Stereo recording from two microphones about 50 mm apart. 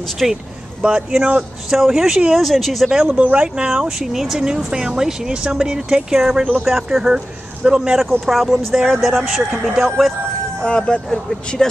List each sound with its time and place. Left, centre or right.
0.2 s speech: centre
0.8 s speech: centre
2.3 s speech: centre
2.9 s speech: centre
8.1 s speech: centre
10.6 s speech: centre